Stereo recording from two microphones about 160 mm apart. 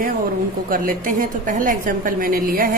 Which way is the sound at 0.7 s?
60° right (ahead or behind).